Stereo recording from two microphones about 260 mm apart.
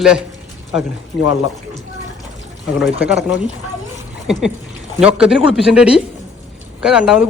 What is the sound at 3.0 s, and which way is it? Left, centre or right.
Speech, centre.